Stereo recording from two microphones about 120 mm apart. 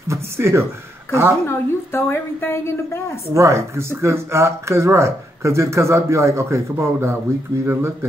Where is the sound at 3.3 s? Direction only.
25° right (ahead or behind).